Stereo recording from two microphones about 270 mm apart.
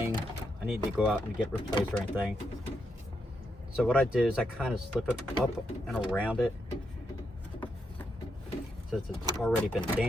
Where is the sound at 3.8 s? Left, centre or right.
Centre.